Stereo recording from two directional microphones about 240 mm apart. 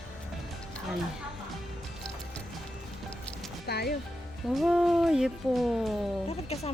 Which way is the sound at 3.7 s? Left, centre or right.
Left.